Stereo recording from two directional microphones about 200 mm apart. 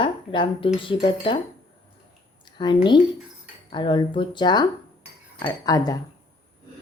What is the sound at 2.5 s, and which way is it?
A woman's voice, 25° left (ahead or behind).